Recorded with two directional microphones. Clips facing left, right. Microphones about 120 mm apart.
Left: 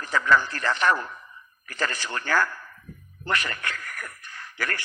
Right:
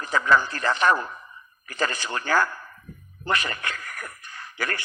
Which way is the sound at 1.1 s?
35° right (ahead or behind).